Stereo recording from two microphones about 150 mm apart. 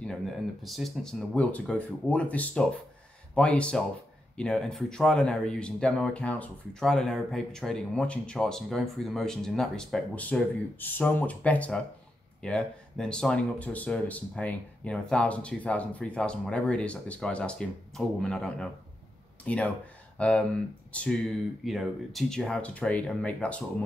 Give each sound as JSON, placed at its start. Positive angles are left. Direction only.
{"t": 0.0, "sound": "speech", "side_deg": 0}